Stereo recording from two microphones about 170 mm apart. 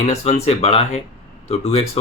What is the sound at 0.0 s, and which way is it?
Speech, 40° left (ahead or behind).